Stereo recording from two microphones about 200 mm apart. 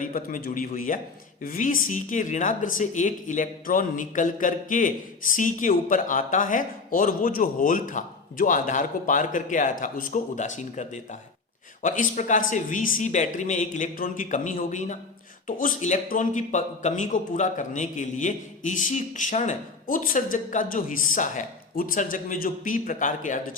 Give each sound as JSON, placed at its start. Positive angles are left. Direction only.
{"t": 0.0, "sound": "a man's voice", "side_deg": 40}